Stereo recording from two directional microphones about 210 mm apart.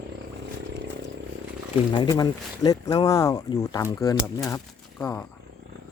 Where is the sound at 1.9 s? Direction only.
20° left (ahead or behind).